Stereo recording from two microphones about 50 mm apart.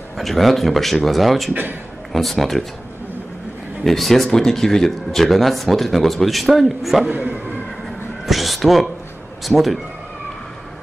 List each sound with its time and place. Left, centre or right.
0.2 s speech: centre
1.5 s a man's voice: right
2.1 s speech: centre
3.8 s speech: centre
7.1 s a man's voice: right
8.3 s speech: centre